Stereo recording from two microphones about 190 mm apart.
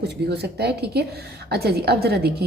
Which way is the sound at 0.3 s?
60° right (ahead or behind).